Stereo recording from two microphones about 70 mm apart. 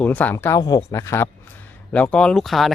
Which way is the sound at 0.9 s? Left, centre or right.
Left.